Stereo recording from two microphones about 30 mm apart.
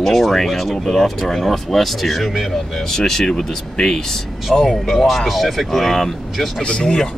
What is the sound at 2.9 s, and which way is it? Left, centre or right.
Speech, centre.